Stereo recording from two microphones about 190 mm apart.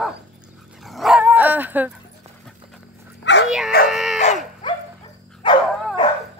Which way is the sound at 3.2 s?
65° left (ahead or behind).